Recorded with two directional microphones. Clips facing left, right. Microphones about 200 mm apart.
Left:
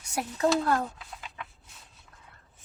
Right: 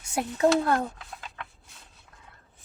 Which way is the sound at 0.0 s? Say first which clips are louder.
Right 4 dB; 25° right (ahead or behind).